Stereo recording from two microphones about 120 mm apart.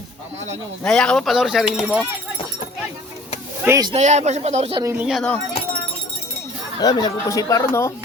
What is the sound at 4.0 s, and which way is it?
Speech, 70° right (ahead or behind).